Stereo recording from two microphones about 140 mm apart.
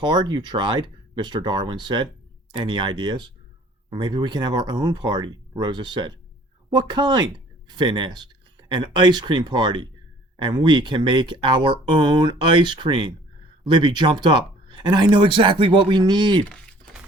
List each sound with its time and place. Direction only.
0.0 s speech: 30° right (ahead or behind)